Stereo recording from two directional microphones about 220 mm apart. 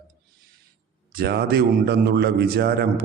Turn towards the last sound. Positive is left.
turn(degrees=-45)  # may be behind; listen again after turning